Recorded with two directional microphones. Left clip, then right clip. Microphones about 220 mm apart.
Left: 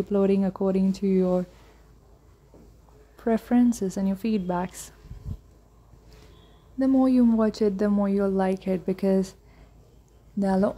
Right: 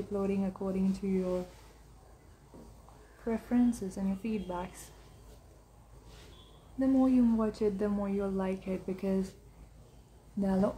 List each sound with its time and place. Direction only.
0.1 s speech: 35° left (ahead or behind)
3.3 s speech: 35° left (ahead or behind)
6.8 s speech: 35° left (ahead or behind)
10.4 s speech: 35° left (ahead or behind)